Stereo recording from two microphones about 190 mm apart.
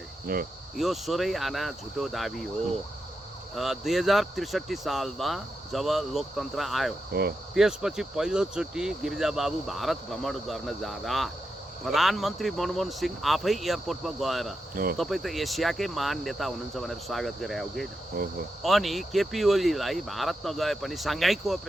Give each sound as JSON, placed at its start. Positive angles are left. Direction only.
{"t": 0.3, "sound": "cricket", "side_deg": -50}
{"t": 0.8, "sound": "speech", "side_deg": 0}
{"t": 3.5, "sound": "speech", "side_deg": 0}
{"t": 7.1, "sound": "speech", "side_deg": -55}
{"t": 7.5, "sound": "speech", "side_deg": 0}
{"t": 18.2, "sound": "cricket", "side_deg": -50}
{"t": 18.6, "sound": "speech", "side_deg": 0}